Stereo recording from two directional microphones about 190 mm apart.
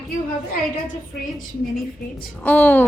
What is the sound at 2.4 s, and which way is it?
Speech, 10° left (ahead or behind).